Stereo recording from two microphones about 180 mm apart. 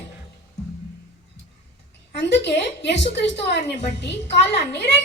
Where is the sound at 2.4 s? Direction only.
70° left (ahead or behind).